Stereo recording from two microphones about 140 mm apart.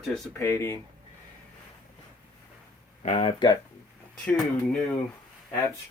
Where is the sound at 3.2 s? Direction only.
30° left (ahead or behind).